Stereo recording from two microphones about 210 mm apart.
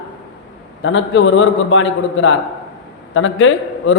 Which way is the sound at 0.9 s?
60° left (ahead or behind).